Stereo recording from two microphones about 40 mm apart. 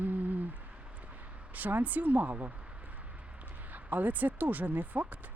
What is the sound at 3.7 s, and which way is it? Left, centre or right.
Speech, right.